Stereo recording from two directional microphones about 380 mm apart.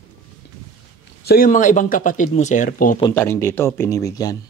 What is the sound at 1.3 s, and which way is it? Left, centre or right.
Speech, left.